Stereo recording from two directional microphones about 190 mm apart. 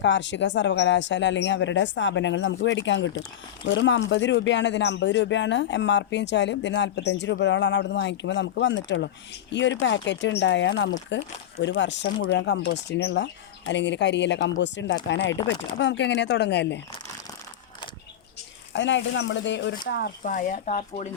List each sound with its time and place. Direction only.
0.0 s speech: 70° left (ahead or behind)
18.7 s speech: 75° left (ahead or behind)
19.9 s speech: 55° left (ahead or behind); by 21.1 s 35° left (ahead or behind)